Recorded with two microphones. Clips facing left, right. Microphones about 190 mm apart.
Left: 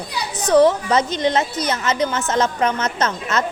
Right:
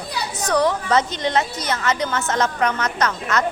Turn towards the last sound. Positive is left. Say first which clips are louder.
# even
turn(degrees=20)  # may be behind; listen again after turning